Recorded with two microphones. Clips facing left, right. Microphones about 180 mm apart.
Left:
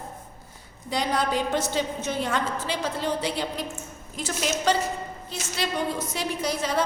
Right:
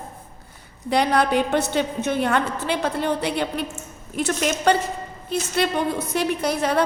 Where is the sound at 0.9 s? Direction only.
65° right (ahead or behind).